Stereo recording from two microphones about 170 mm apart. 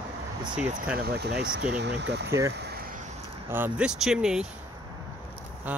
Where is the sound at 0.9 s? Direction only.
70° right (ahead or behind); by 2.3 s 85° right.